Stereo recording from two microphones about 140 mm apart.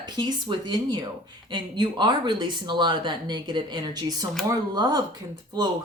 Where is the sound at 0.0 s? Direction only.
30° right (ahead or behind).